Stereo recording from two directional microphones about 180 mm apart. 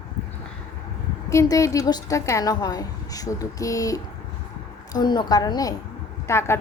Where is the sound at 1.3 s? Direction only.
15° left (ahead or behind).